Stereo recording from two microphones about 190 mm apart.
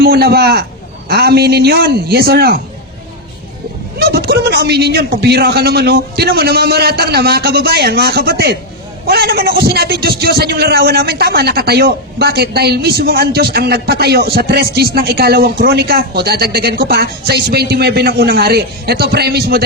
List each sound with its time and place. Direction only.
0.0 s a man's voice: 55° right (ahead or behind)
3.9 s a man's voice: 55° right (ahead or behind)